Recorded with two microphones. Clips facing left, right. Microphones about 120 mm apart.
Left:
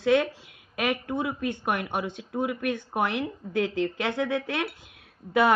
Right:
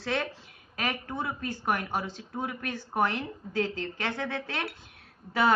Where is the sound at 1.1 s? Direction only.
15° left (ahead or behind).